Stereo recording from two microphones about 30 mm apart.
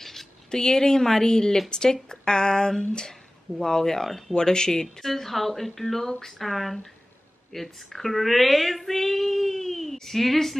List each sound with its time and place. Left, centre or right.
0.0 s a sound: centre
0.5 s speech: left
5.0 s speech: centre
6.3 s speech: centre